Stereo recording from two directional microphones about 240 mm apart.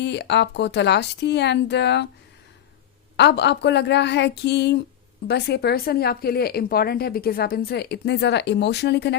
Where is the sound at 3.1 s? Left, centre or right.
Left.